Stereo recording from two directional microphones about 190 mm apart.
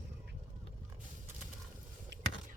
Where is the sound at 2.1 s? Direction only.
65° right (ahead or behind).